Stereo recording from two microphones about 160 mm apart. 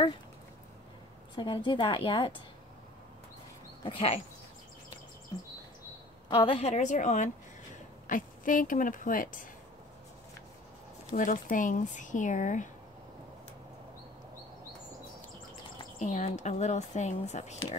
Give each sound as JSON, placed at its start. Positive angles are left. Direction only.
{"t": 1.3, "sound": "a woman's voice", "side_deg": 30}
{"t": 3.8, "sound": "a woman's voice", "side_deg": 35}
{"t": 6.2, "sound": "speech", "side_deg": 30}
{"t": 11.1, "sound": "speech", "side_deg": 55}
{"t": 16.0, "sound": "speech", "side_deg": 45}